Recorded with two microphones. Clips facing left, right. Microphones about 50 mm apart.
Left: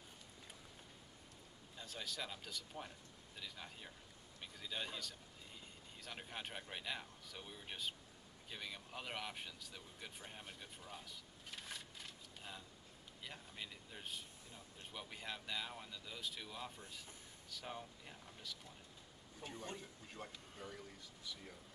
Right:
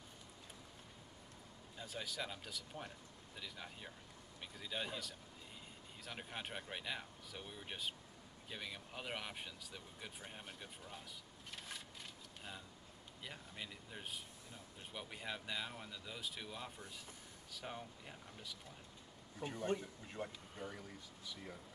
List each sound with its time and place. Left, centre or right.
1.8 s speech: centre
11.5 s a sound: centre
13.2 s speech: centre
15.1 s speech: centre
19.5 s speech: right
20.1 s speech: centre